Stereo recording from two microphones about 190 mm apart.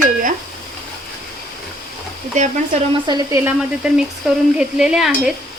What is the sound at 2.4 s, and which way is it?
Speech, 40° right (ahead or behind).